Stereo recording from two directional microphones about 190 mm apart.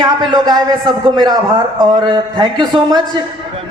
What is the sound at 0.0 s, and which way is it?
A man's voice, 25° right (ahead or behind).